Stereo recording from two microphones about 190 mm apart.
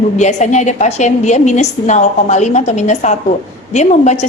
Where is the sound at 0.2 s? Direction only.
35° left (ahead or behind).